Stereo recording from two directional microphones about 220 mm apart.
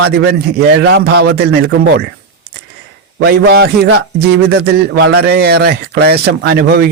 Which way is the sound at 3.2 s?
45° right (ahead or behind).